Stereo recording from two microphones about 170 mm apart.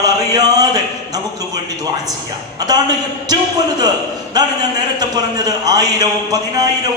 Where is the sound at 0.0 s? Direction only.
20° right (ahead or behind).